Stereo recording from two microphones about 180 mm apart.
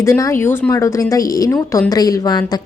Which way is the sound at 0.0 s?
15° left (ahead or behind).